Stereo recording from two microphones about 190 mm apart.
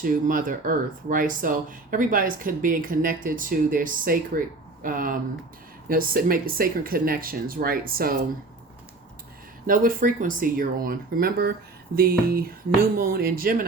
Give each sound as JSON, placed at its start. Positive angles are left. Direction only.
{"t": 0.0, "sound": "speech", "side_deg": -45}
{"t": 9.6, "sound": "speech", "side_deg": -45}